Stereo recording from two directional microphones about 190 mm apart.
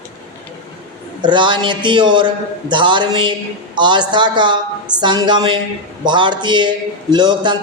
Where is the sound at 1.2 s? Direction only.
25° right (ahead or behind).